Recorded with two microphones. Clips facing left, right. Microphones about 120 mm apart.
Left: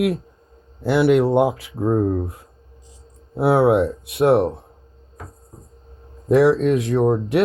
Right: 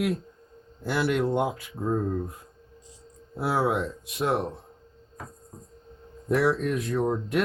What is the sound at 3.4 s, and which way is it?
Speech, 65° left (ahead or behind).